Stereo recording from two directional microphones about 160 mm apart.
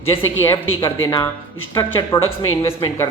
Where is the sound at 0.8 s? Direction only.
25° left (ahead or behind).